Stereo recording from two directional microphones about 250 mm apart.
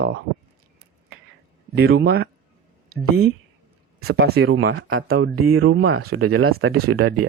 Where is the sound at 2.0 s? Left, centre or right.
Right.